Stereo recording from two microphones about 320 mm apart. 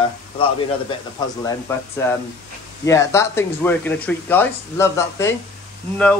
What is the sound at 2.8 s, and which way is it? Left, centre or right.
Speech, centre.